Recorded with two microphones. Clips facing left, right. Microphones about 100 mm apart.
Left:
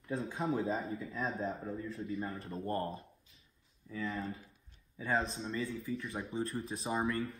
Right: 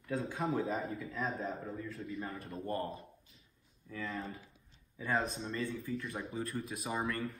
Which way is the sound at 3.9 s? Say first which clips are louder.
Left 2 dB; centre (ahead or behind).